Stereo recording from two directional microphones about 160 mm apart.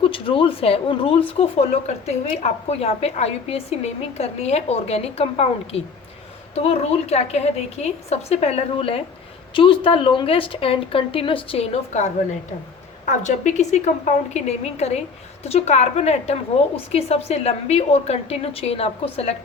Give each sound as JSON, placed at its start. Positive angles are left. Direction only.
{"t": 0.0, "sound": "a woman's voice", "side_deg": 35}